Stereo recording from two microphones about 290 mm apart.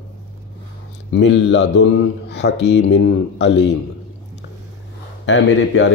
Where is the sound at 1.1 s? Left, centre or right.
Left.